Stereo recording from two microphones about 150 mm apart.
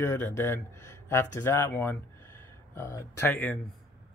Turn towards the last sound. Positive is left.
turn(degrees=10)  # may be behind; listen again after turning